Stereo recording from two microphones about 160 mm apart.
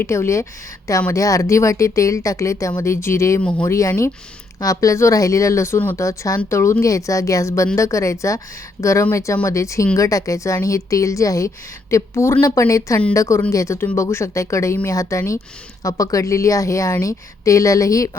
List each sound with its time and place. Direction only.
0.0 s speech: 15° left (ahead or behind)